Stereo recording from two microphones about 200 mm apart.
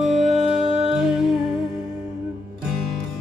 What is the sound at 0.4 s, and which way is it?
Music, 30° right (ahead or behind).